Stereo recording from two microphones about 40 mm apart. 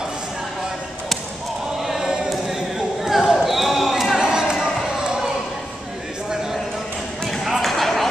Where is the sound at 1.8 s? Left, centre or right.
Centre.